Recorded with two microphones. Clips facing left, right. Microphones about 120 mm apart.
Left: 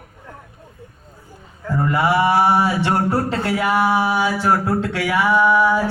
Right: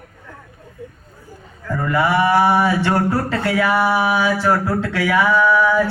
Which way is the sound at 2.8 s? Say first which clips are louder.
Right 1 dB; 25° left (ahead or behind).